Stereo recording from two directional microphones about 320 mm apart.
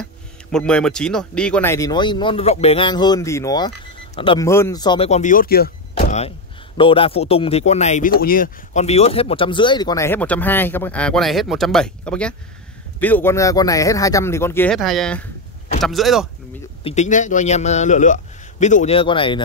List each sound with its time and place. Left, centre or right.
0.0 s speech: centre
16.8 s a man's voice: left